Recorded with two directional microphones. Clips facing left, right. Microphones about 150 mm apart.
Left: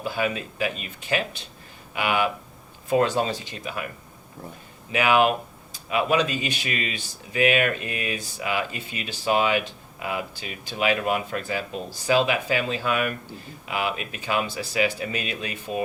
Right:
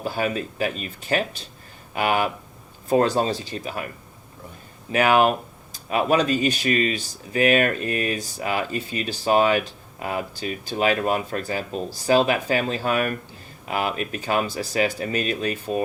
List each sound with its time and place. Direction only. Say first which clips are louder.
0.0 s speech: right 2 dB; 40° right (ahead or behind)
4.9 s speech: right 2 dB; 45° right (ahead or behind)